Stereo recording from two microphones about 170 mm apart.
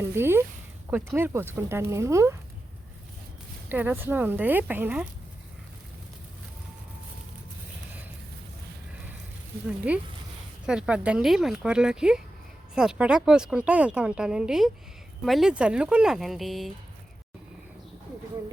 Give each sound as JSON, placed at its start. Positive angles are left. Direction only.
{"t": 0.0, "sound": "speech", "side_deg": -15}
{"t": 3.7, "sound": "speech", "side_deg": -10}
{"t": 9.9, "sound": "speech", "side_deg": -10}